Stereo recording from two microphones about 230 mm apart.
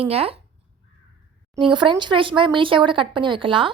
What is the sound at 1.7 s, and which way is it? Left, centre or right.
A woman's voice, centre.